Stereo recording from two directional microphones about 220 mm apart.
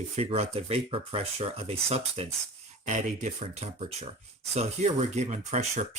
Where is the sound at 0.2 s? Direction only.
25° right (ahead or behind).